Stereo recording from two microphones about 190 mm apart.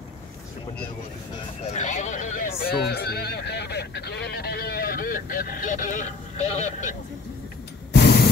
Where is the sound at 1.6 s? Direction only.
40° left (ahead or behind).